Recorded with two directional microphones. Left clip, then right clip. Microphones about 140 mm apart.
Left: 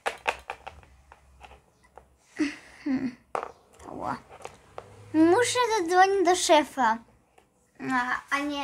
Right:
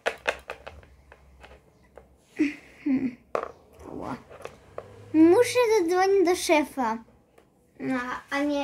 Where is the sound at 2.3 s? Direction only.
15° left (ahead or behind).